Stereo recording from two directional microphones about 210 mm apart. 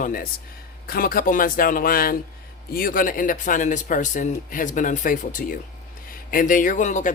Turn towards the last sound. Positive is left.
turn(degrees=35)  # may be behind; listen again after turning